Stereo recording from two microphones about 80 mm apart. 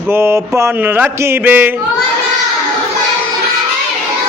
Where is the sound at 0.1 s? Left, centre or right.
Right.